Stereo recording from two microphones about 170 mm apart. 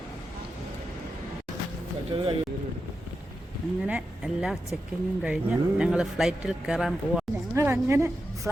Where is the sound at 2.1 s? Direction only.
30° right (ahead or behind).